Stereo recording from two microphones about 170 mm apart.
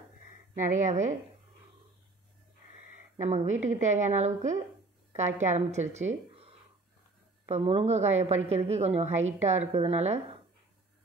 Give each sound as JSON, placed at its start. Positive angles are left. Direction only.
{"t": 0.6, "sound": "a woman's voice", "side_deg": -45}
{"t": 3.2, "sound": "a woman's voice", "side_deg": -45}
{"t": 7.4, "sound": "a woman's voice", "side_deg": -35}